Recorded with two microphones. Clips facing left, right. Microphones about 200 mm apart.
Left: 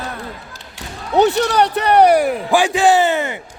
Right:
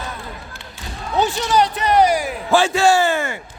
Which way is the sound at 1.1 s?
65° left (ahead or behind).